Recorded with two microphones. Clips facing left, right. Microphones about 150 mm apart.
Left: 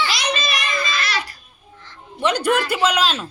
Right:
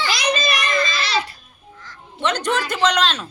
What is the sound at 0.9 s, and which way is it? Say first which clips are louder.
Speech: right 2 dB; 30° right (ahead or behind).